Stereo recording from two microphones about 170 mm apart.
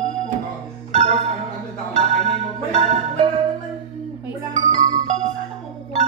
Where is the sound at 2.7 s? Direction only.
35° right (ahead or behind).